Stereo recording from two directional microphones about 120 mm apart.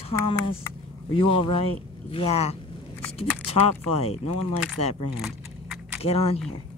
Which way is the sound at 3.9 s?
60° left (ahead or behind).